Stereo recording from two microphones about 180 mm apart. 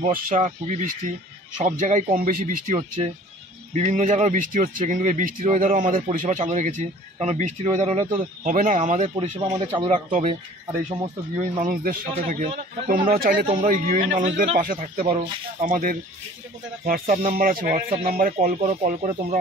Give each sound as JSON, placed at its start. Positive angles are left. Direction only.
{"t": 0.0, "sound": "speech", "side_deg": -45}
{"t": 9.5, "sound": "speech", "side_deg": -30}
{"t": 11.6, "sound": "speech", "side_deg": -50}
{"t": 18.1, "sound": "speech", "side_deg": -55}
{"t": 18.6, "sound": "speech", "side_deg": -40}